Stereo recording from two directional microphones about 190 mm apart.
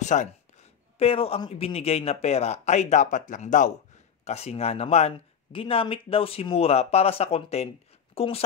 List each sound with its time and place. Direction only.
0.0 s speech: 40° left (ahead or behind)